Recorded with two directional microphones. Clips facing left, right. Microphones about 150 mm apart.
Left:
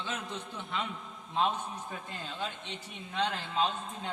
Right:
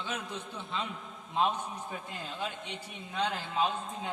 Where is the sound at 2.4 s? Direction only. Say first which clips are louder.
Right 1 dB; 10° right (ahead or behind).